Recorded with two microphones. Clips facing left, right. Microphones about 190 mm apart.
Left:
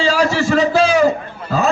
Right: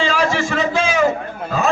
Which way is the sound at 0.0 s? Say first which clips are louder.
Left 3 dB; 35° left (ahead or behind).